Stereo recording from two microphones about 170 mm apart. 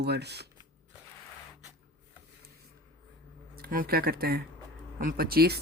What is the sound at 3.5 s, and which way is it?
Speech, 60° right (ahead or behind).